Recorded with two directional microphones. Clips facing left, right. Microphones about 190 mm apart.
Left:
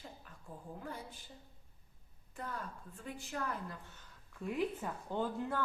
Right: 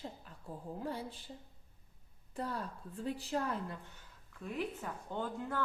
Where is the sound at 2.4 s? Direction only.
35° right (ahead or behind).